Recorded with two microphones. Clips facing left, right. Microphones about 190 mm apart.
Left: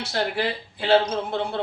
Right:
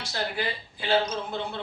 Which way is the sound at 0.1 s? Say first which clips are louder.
Left 5 dB; 65° left (ahead or behind).